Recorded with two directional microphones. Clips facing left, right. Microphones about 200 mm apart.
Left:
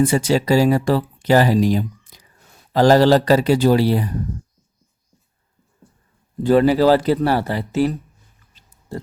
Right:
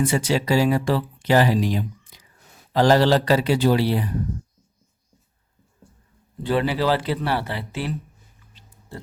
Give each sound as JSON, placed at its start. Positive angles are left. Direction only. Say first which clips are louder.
{"t": 0.0, "sound": "speech", "louder": "left 5 dB", "side_deg": 40}
{"t": 6.4, "sound": "speech", "louder": "left 8 dB", "side_deg": 45}